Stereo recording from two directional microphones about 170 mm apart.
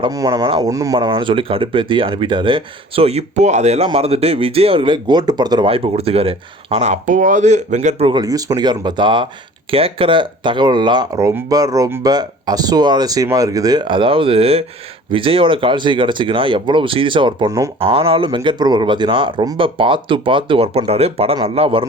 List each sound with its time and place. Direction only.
0.0 s speech: 20° right (ahead or behind); by 8.0 s 45° right (ahead or behind)
8.0 s speech: 25° right (ahead or behind)